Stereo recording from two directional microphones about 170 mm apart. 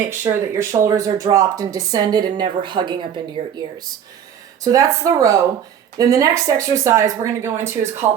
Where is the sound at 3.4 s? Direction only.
45° right (ahead or behind).